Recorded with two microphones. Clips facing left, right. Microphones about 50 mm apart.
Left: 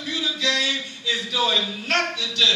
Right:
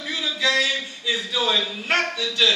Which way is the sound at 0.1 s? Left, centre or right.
Centre.